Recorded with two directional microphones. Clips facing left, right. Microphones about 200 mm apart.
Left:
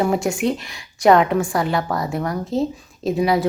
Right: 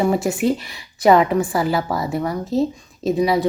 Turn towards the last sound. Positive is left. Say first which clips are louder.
# right 1 dB
turn(degrees=0)  # may be behind; listen again after turning